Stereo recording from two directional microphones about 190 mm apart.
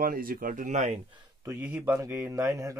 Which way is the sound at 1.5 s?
10° right (ahead or behind).